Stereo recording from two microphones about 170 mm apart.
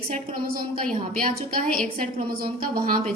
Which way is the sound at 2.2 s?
60° right (ahead or behind).